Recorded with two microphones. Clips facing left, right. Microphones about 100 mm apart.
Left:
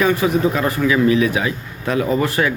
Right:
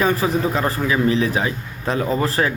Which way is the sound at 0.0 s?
35° right (ahead or behind).